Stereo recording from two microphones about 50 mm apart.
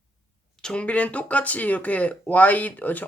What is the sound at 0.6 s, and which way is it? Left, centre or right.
Speech, left.